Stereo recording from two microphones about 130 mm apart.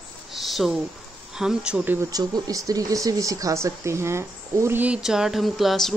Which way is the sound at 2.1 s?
30° right (ahead or behind).